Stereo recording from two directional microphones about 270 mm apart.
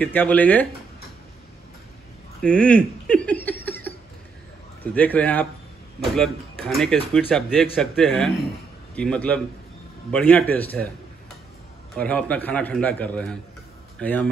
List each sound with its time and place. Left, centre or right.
0.0 s speech: centre
2.4 s a sound: centre
4.9 s speech: centre
11.9 s speech: centre